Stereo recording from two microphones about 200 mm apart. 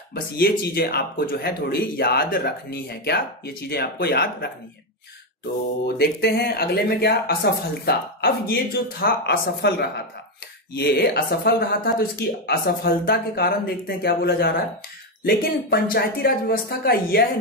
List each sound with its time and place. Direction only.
0.1 s speech: 50° left (ahead or behind)
5.9 s speech: 50° left (ahead or behind)